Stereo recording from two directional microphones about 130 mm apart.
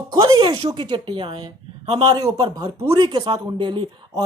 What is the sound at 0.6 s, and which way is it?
Speech, 35° right (ahead or behind).